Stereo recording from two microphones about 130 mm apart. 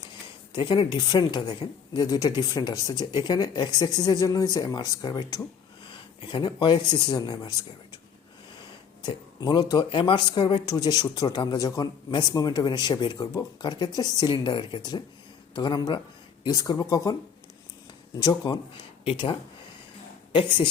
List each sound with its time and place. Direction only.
0.5 s speech: 35° left (ahead or behind)
5.8 s speech: 40° left (ahead or behind)
9.0 s speech: 35° left (ahead or behind)
18.2 s speech: 30° left (ahead or behind)
19.0 s speech: 45° left (ahead or behind)